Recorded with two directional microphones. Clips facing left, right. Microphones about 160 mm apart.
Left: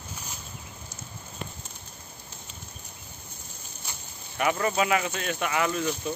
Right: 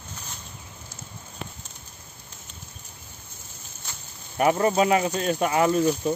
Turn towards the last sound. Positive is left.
turn(degrees=-35)  # may be behind; listen again after turning